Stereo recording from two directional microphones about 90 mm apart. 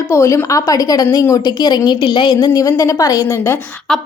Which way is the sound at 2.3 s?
40° left (ahead or behind).